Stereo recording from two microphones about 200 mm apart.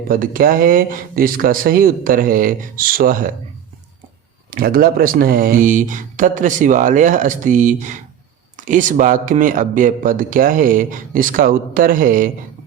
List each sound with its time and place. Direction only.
0.1 s speech: 45° right (ahead or behind)
4.5 s speech: 45° right (ahead or behind)